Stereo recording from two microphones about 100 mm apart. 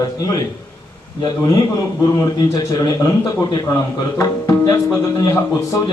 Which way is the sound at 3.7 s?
35° left (ahead or behind).